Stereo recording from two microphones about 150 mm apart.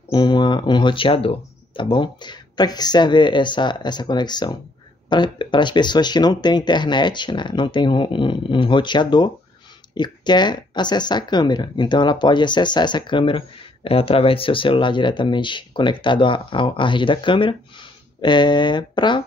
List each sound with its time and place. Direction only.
0.1 s speech: 30° left (ahead or behind)